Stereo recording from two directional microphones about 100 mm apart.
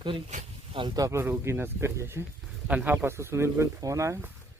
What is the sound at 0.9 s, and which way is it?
Speech, 35° right (ahead or behind).